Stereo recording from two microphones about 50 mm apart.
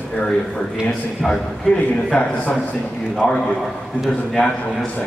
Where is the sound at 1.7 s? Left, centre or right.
Left.